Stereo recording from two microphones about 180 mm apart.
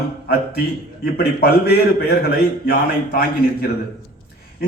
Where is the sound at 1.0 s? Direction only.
60° left (ahead or behind).